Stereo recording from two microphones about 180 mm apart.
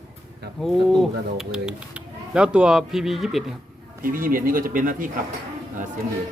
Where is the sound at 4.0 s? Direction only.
55° right (ahead or behind).